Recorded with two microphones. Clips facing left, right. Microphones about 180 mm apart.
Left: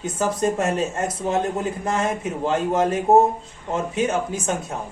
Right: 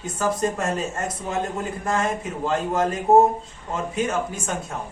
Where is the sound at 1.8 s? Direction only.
20° left (ahead or behind).